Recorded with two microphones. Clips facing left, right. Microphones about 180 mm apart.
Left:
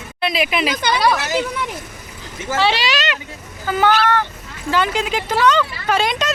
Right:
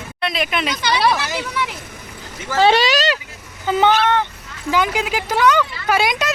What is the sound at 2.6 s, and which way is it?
Speech, 45° right (ahead or behind).